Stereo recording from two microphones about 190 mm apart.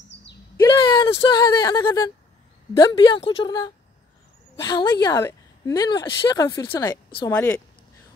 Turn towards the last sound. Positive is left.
turn(degrees=10)  # may be behind; listen again after turning